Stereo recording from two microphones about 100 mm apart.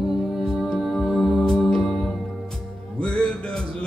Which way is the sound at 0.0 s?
Centre (ahead or behind).